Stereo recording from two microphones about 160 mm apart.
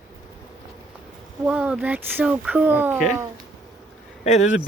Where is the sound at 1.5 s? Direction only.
5° right (ahead or behind).